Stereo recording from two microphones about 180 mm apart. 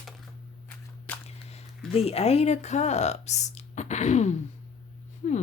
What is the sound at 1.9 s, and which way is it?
Speech, 35° left (ahead or behind).